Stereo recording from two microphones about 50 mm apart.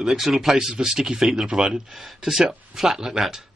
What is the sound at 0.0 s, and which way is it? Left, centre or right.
Speech, centre.